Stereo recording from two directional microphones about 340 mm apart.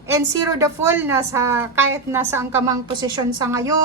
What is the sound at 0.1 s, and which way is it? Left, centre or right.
A woman's voice, centre.